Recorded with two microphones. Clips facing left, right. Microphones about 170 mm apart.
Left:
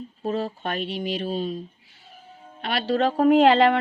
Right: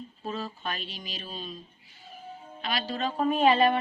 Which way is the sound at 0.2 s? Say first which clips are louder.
Left 9 dB; 60° left (ahead or behind).